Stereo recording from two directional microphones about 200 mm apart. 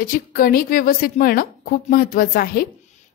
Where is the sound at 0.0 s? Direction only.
45° left (ahead or behind).